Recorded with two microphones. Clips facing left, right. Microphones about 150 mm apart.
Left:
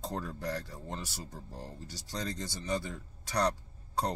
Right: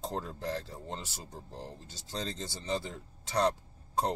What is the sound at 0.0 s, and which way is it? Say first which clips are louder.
Speech: right 1 dB; 20° right (ahead or behind).